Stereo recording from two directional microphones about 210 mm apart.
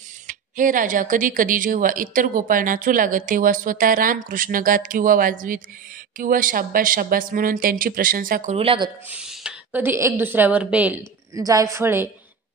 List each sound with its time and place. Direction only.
0.3 s speech: 40° right (ahead or behind)
9.1 s speech: 5° right (ahead or behind)